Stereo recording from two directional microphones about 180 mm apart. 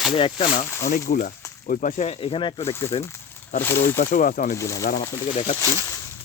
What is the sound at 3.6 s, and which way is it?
Speech, 10° left (ahead or behind).